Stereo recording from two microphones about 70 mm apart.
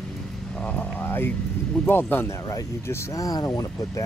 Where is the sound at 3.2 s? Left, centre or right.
Left.